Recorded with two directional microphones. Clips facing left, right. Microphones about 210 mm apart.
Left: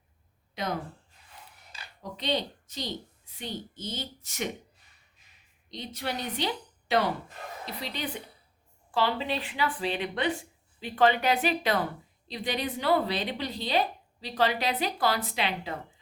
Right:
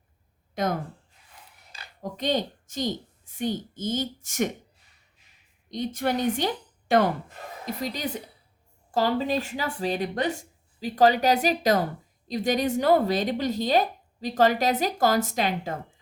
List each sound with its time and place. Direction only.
0.5 s speech: 50° right (ahead or behind)
2.0 s a woman's voice: 45° right (ahead or behind)
5.7 s a woman's voice: 50° right (ahead or behind)